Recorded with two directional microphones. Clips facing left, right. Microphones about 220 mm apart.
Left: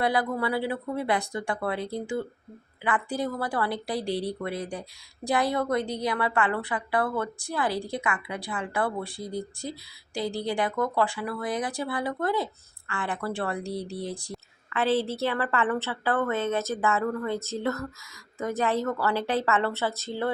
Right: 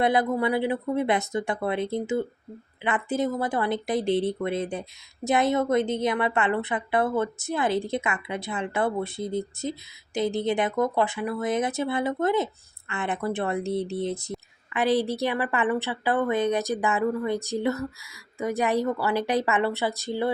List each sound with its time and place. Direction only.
0.0 s speech: 20° right (ahead or behind)